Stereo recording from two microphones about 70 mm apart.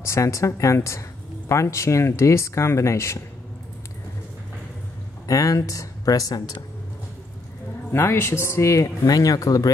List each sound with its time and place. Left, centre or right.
0.0 s speech: left
5.2 s speech: left
7.9 s speech: left